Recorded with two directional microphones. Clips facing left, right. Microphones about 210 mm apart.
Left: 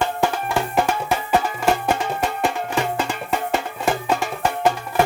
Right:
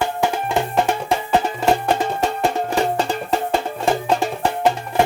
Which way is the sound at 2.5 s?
35° right (ahead or behind).